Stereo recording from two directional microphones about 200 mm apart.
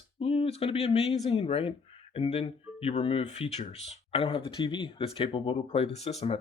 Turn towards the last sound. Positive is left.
turn(degrees=30)  # may be behind; listen again after turning